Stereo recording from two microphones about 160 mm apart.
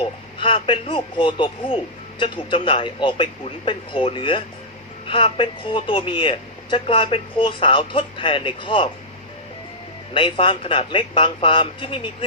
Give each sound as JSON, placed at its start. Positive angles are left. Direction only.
{"t": 0.0, "sound": "speech", "side_deg": 30}
{"t": 10.2, "sound": "speech", "side_deg": 35}